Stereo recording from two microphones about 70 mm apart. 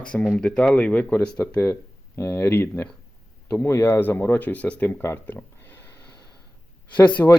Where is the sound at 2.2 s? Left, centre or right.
Left; by 4.9 s centre.